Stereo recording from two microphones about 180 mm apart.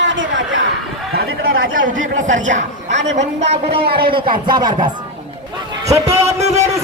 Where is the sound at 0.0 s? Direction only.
90° right.